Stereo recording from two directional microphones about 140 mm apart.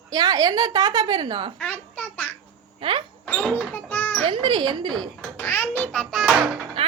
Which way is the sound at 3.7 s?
10° left (ahead or behind).